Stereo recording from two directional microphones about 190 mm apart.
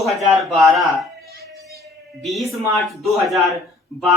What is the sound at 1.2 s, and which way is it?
Chopping, 55° right (ahead or behind).